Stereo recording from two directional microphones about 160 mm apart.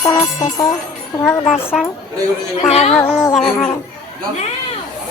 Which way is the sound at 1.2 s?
5° left (ahead or behind).